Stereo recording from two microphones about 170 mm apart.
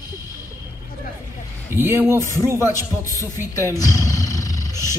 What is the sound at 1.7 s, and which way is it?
A man's voice, 15° right (ahead or behind).